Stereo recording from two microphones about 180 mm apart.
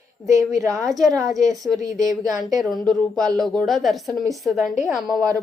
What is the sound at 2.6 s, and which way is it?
A woman's voice, centre (ahead or behind).